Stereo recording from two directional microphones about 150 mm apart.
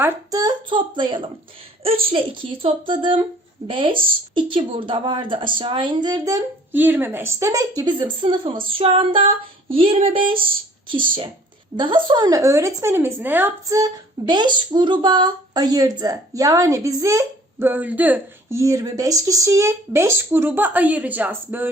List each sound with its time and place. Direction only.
0.3 s speech: 25° right (ahead or behind)
6.7 s speech: 10° right (ahead or behind); by 10.3 s 35° right (ahead or behind)
11.8 s speech: 35° right (ahead or behind); by 13.5 s 10° right (ahead or behind)
13.7 s speech: 25° right (ahead or behind)